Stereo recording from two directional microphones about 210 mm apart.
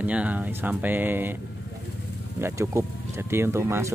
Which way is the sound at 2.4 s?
15° right (ahead or behind).